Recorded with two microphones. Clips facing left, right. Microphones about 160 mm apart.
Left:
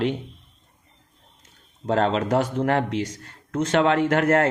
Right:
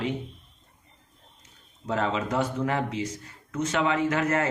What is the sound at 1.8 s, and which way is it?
Speech, 70° left (ahead or behind).